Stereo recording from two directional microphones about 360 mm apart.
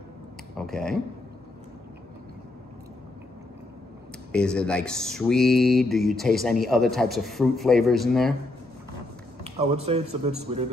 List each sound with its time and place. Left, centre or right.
0.6 s speech: centre
4.3 s speech: centre
9.4 s a man's voice: centre